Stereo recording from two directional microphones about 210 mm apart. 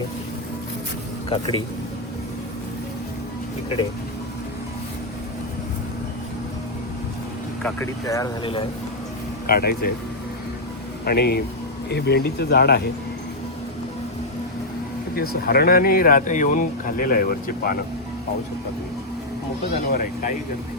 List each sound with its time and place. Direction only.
1.3 s speech: 25° left (ahead or behind)
7.6 s speech: 10° left (ahead or behind)
9.5 s speech: 45° left (ahead or behind)
11.0 s speech: 50° left (ahead or behind)
15.1 s speech: 45° left (ahead or behind)
19.9 s speech: 40° left (ahead or behind)